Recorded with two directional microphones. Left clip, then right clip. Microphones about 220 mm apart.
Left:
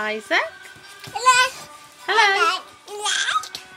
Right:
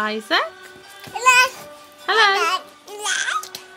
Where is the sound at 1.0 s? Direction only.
25° right (ahead or behind).